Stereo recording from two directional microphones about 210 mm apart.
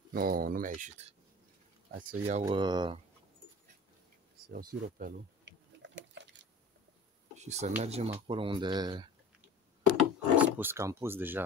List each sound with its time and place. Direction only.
0.1 s speech: 45° right (ahead or behind)
2.4 s speech: 20° right (ahead or behind)
4.5 s speech: 45° right (ahead or behind)
5.8 s a sound: 60° right (ahead or behind)
7.3 s speech: 30° right (ahead or behind)
9.8 s speech: 10° right (ahead or behind)